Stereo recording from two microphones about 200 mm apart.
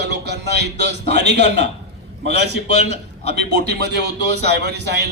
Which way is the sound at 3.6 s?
55° right (ahead or behind).